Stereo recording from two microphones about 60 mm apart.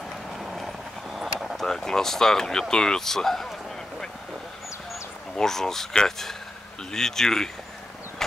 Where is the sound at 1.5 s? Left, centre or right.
Centre.